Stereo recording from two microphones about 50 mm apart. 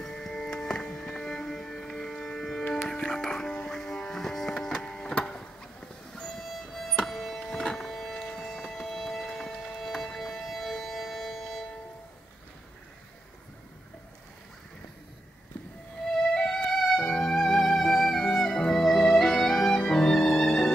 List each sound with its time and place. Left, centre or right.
0.0 s music: centre
5.2 s a sound: centre
7.1 s music: centre
16.3 s music: centre
18.8 s music: centre